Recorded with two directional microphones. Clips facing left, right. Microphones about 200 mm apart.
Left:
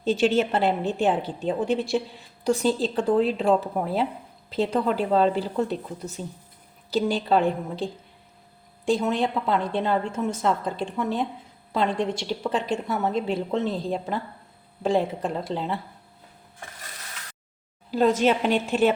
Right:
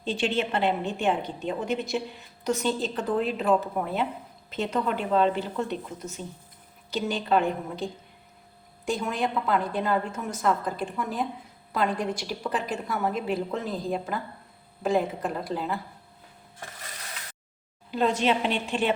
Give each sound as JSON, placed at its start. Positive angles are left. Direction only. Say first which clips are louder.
{"t": 0.0, "sound": "a woman's voice", "louder": "left 6 dB", "side_deg": 45}
{"t": 17.9, "sound": "a woman's voice", "louder": "left 4 dB", "side_deg": 40}